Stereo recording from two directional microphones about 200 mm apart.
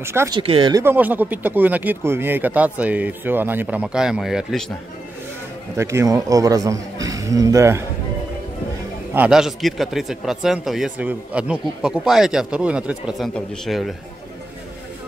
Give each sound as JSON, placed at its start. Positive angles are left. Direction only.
{"t": 0.0, "sound": "speech", "side_deg": -15}
{"t": 0.4, "sound": "speech", "side_deg": -25}
{"t": 0.8, "sound": "speech", "side_deg": -10}
{"t": 5.8, "sound": "speech", "side_deg": -15}
{"t": 9.1, "sound": "speech", "side_deg": -5}